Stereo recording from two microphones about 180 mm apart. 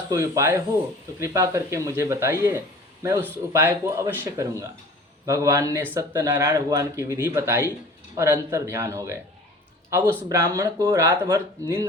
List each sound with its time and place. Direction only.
0.1 s a man's voice: 15° right (ahead or behind)